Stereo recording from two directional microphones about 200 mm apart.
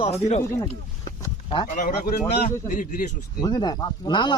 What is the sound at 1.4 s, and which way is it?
Speech, 25° left (ahead or behind).